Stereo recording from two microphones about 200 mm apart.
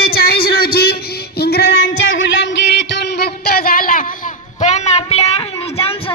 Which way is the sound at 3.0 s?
55° left (ahead or behind).